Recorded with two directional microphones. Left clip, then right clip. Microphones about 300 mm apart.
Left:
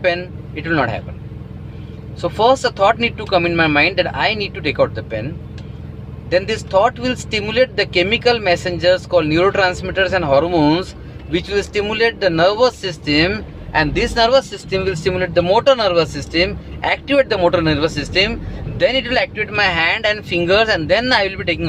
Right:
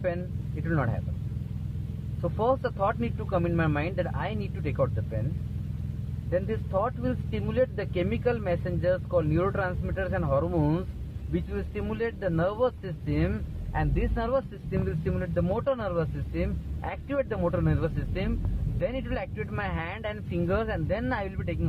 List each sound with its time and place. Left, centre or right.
0.6 s speech: centre
2.2 s speech: centre
6.3 s speech: centre